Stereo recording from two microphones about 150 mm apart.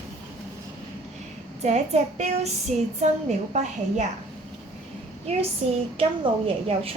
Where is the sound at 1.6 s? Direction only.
45° right (ahead or behind).